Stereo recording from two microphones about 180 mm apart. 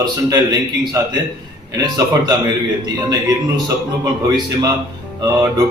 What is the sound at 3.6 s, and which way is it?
Speech, 20° right (ahead or behind).